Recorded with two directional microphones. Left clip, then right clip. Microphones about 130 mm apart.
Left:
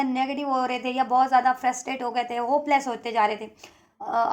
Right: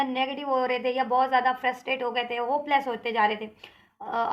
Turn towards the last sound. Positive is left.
turn(degrees=40)  # may be behind; listen again after turning